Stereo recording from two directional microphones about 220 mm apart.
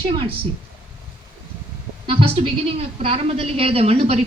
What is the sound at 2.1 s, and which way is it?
A woman's voice, 25° right (ahead or behind).